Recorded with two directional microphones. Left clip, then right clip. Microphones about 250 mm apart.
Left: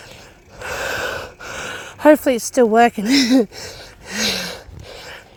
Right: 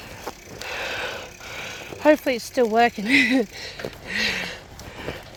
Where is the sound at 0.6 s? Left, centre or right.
Left.